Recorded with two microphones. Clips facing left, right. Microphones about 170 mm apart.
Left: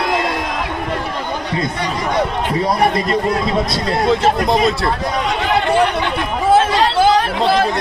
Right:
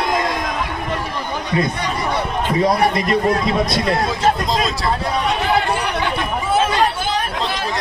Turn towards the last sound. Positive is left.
turn(degrees=80)